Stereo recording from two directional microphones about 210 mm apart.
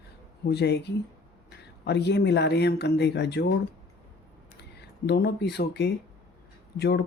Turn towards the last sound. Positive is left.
turn(degrees=50)  # may be behind; listen again after turning